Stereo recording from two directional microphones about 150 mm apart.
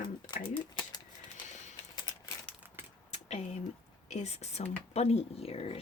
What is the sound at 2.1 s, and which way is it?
Crumpling, 25° left (ahead or behind).